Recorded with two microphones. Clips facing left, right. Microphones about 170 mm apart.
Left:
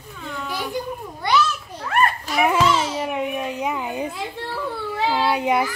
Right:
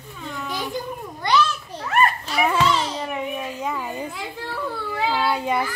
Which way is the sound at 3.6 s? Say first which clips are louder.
Left 3 dB; 15° left (ahead or behind).